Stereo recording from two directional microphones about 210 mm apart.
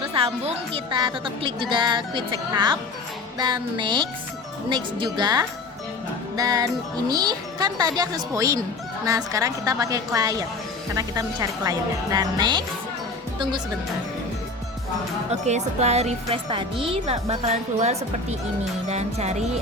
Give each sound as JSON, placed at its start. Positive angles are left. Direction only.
{"t": 0.1, "sound": "a woman's voice", "side_deg": -25}
{"t": 5.1, "sound": "a woman's voice", "side_deg": -20}
{"t": 15.3, "sound": "speech", "side_deg": -30}